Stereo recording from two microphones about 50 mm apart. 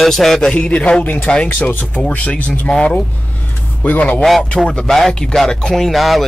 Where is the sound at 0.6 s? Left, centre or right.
Left.